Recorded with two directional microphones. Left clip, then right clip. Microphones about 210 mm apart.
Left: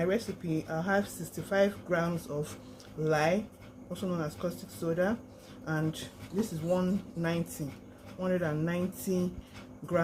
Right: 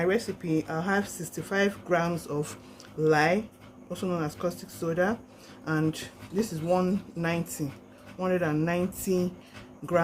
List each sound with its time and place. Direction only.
0.0 s speech: 50° right (ahead or behind)